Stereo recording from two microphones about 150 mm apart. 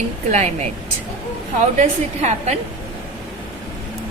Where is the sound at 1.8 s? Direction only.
45° right (ahead or behind).